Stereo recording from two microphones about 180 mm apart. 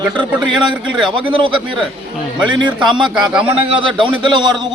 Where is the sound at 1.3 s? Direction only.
25° right (ahead or behind).